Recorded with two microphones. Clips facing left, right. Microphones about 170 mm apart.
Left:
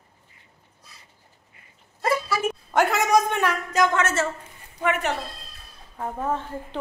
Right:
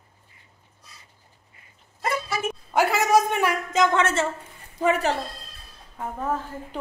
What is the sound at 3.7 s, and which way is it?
Speech, 20° right (ahead or behind).